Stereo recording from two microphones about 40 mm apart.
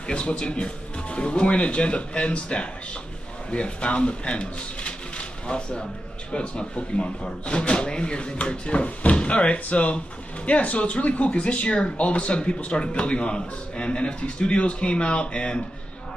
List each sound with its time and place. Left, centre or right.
0.0 s speech: left